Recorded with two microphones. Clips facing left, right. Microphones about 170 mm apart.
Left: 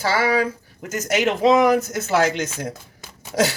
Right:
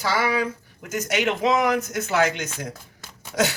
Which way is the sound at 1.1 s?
35° left (ahead or behind).